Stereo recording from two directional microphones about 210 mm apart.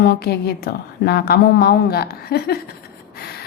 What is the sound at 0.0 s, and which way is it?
A woman's voice, 50° left (ahead or behind).